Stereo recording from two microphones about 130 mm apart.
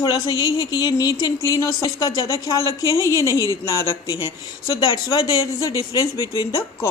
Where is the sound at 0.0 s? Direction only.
30° left (ahead or behind).